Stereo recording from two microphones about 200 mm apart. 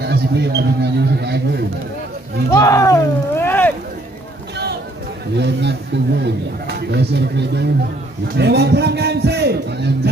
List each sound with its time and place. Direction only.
0.0 s a man's voice: 55° right (ahead or behind)
2.5 s speech: 15° left (ahead or behind)
5.3 s a man's voice: 60° right (ahead or behind)